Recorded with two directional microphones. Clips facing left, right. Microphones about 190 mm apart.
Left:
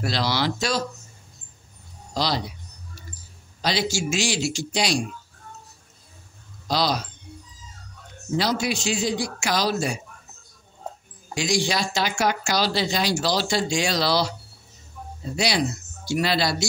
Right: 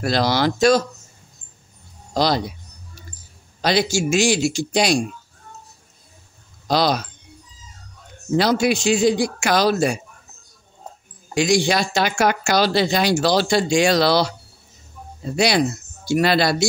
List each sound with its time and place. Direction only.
0.0 s a man's voice: 50° right (ahead or behind)
2.1 s speech: 50° right (ahead or behind)
3.6 s a man's voice: 55° right (ahead or behind)
6.7 s speech: 55° right (ahead or behind)
8.4 s speech: 60° right (ahead or behind)
11.3 s speech: 55° right (ahead or behind)
15.3 s speech: 55° right (ahead or behind)